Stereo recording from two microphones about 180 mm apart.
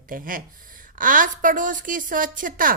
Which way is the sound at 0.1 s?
50° right (ahead or behind).